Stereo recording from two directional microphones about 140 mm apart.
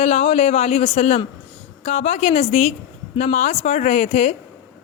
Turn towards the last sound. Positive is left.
turn(degrees=50)  # may be behind; listen again after turning